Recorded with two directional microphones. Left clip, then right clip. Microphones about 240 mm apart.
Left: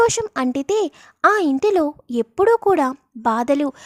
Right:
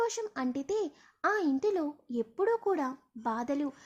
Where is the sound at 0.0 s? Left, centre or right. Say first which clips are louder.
Left 15 dB; left.